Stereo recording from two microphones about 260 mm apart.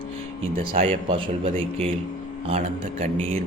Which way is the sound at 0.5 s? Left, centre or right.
Right.